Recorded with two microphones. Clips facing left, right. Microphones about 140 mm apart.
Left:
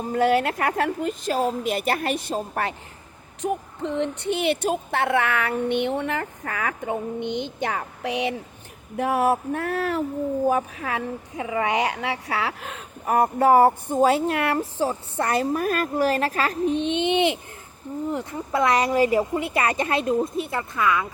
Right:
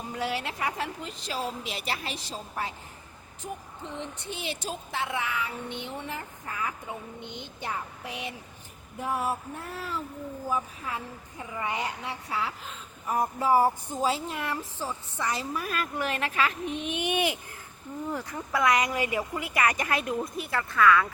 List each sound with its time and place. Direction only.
0.1 s a woman's voice: 50° left (ahead or behind); by 21.1 s 20° left (ahead or behind)